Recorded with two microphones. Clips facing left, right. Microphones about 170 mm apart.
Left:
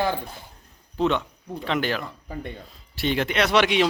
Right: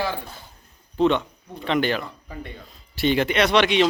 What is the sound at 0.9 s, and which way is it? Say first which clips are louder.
A man's voice: right 3 dB; centre (ahead or behind).